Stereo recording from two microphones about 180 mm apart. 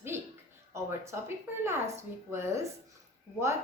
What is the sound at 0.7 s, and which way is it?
A woman's voice, 15° right (ahead or behind).